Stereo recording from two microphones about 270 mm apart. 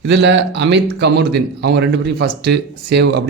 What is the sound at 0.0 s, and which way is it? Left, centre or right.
Speech, right.